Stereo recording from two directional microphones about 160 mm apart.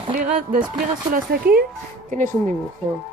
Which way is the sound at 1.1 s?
65° right (ahead or behind).